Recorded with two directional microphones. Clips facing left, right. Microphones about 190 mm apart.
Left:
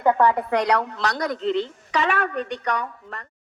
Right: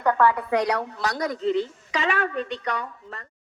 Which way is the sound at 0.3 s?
65° left (ahead or behind).